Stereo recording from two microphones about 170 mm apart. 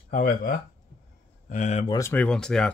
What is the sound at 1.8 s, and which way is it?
Speech, 20° left (ahead or behind).